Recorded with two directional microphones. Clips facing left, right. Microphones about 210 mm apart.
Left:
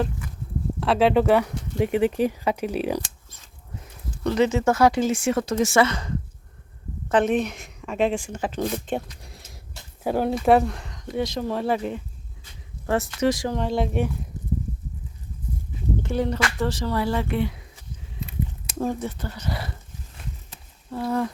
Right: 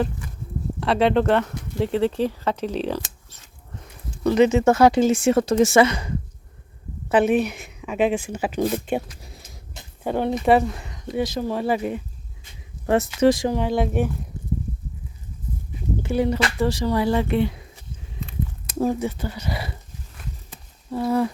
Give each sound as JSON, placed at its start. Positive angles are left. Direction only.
{"t": 0.8, "sound": "speech", "side_deg": 5}
{"t": 4.2, "sound": "speech", "side_deg": -15}
{"t": 5.6, "sound": "speech", "side_deg": -15}
{"t": 12.8, "sound": "speech", "side_deg": -20}
{"t": 13.5, "sound": "speech", "side_deg": -5}
{"t": 16.0, "sound": "speech", "side_deg": -10}
{"t": 18.8, "sound": "speech", "side_deg": -10}
{"t": 20.9, "sound": "speech", "side_deg": -10}